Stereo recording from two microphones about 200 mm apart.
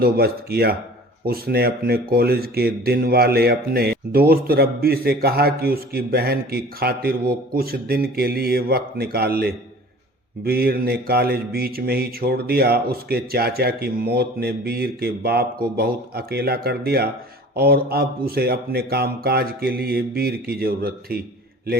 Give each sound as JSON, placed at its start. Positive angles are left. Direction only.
{"t": 0.0, "sound": "speech", "side_deg": -50}